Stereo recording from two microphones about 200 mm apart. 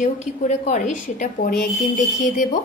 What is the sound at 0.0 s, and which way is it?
A woman's voice, 35° left (ahead or behind).